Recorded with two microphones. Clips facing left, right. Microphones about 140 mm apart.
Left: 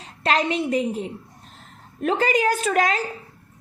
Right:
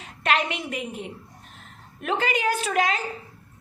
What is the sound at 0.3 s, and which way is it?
A woman's voice, 35° left (ahead or behind).